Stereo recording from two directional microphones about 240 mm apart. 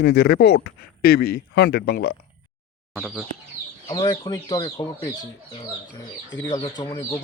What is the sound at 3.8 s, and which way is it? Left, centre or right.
Speech, centre.